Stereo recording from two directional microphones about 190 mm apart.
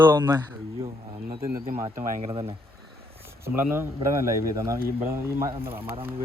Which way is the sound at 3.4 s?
10° right (ahead or behind).